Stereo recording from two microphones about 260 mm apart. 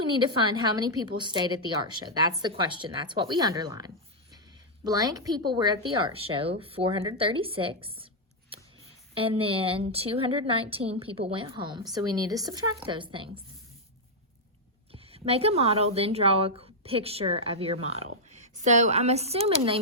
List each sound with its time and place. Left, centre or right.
0.0 s a woman's voice: centre
14.9 s a woman's voice: right